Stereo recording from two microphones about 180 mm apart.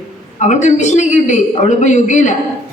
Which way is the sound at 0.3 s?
40° left (ahead or behind).